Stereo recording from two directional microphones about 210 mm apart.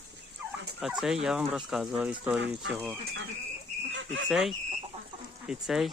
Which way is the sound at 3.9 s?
60° right (ahead or behind).